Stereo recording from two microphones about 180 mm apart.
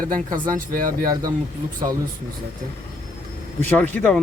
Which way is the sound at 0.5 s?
50° right (ahead or behind).